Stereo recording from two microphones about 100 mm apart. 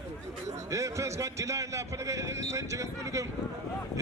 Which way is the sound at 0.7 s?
30° right (ahead or behind).